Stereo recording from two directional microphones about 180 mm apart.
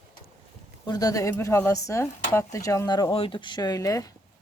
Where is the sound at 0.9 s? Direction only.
20° left (ahead or behind).